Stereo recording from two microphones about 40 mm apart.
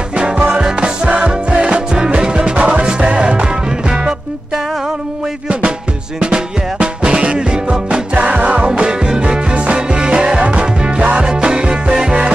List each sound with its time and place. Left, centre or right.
0.1 s music: right
6.1 s music: right